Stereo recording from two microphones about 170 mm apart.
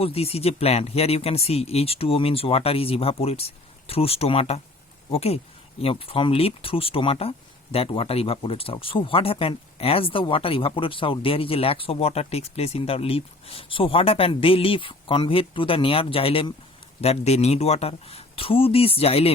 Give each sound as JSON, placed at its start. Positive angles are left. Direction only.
{"t": 0.0, "sound": "speech", "side_deg": 35}